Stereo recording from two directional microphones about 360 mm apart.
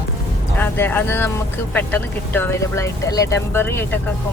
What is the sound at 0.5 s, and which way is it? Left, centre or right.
Speech, centre.